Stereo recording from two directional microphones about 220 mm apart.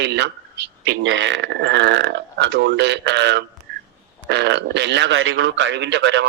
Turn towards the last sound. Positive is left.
turn(degrees=-55)  # may be behind; listen again after turning